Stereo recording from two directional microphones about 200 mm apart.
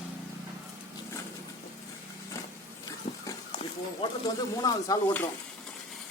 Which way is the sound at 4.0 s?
20° left (ahead or behind).